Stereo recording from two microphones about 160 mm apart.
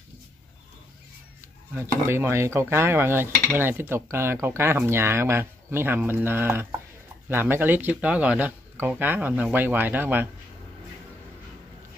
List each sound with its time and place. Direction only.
1.8 s cutlery: 15° right (ahead or behind)